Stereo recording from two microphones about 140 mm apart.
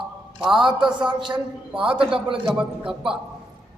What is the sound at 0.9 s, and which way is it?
Speech, 35° right (ahead or behind).